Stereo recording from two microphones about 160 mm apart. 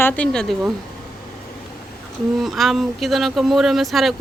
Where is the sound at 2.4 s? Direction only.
Centre (ahead or behind).